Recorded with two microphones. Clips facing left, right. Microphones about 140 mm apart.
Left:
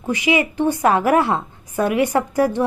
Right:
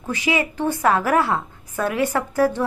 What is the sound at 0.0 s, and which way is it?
A woman's voice, 15° left (ahead or behind).